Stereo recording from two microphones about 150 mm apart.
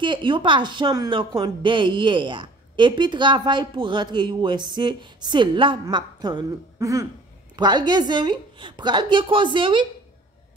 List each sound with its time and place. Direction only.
0.0 s a woman's voice: 35° right (ahead or behind)